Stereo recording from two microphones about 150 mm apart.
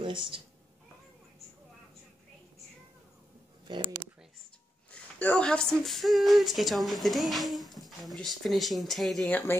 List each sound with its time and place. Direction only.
0.0 s speech: 35° right (ahead or behind)
3.6 s speech: 30° right (ahead or behind)
4.9 s a sound: 10° left (ahead or behind)
5.8 s female singing: centre (ahead or behind)